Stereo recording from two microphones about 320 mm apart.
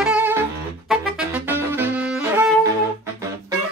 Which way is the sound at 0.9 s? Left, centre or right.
Centre.